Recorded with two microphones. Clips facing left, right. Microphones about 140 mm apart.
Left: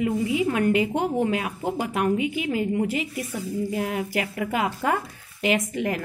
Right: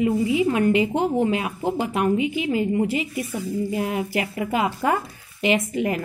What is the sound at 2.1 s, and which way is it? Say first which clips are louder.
Speech: right 2 dB; 50° left (ahead or behind).